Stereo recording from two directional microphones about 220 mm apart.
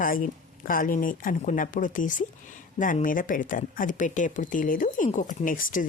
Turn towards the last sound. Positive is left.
turn(degrees=40)  # may be behind; listen again after turning